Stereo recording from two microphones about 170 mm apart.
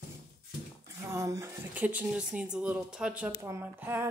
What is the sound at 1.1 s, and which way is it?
Speech, 20° right (ahead or behind).